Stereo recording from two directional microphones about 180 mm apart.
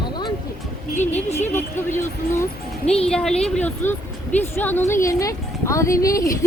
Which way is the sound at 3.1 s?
5° left (ahead or behind).